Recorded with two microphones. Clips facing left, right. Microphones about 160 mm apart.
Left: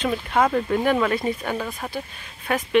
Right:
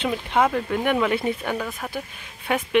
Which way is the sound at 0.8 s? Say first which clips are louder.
Left 1 dB; 10° right (ahead or behind).